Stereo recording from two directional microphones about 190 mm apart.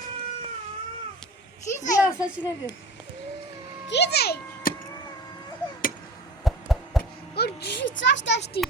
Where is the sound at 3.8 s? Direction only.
65° left (ahead or behind).